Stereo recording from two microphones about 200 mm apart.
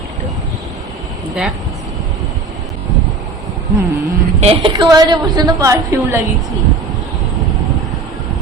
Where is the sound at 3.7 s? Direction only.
15° right (ahead or behind).